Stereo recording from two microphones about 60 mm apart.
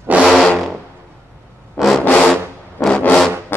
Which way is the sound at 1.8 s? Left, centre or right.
Left.